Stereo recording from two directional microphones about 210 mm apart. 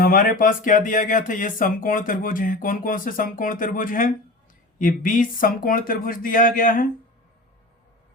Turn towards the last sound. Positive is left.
turn(degrees=40)  # may be behind; listen again after turning